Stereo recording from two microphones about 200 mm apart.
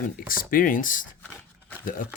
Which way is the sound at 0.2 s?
45° left (ahead or behind).